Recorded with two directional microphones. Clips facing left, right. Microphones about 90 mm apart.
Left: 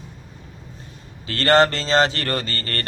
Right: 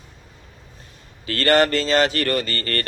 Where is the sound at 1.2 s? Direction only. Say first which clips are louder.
Left 1 dB; 30° left (ahead or behind).